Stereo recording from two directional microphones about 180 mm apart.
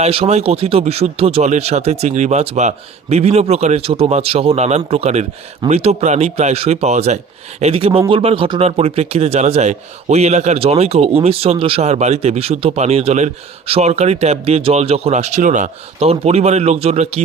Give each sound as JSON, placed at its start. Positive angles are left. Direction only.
{"t": 0.0, "sound": "speech", "side_deg": -35}